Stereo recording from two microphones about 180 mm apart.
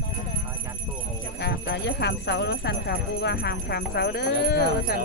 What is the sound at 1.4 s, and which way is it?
Speech, 65° left (ahead or behind).